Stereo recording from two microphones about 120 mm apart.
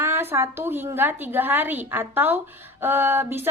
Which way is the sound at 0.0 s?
20° right (ahead or behind).